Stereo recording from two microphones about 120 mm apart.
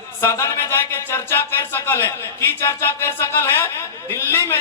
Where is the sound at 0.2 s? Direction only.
25° left (ahead or behind).